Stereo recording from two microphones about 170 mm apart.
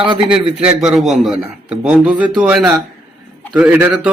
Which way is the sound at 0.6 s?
Centre (ahead or behind).